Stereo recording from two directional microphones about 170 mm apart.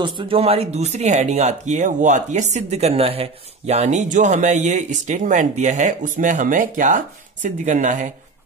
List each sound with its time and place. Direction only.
0.0 s speech: 30° right (ahead or behind); by 8.1 s 45° right (ahead or behind)